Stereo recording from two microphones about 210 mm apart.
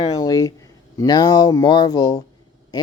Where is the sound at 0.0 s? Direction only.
20° left (ahead or behind).